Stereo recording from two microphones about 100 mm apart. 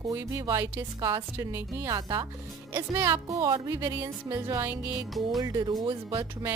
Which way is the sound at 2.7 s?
25° right (ahead or behind).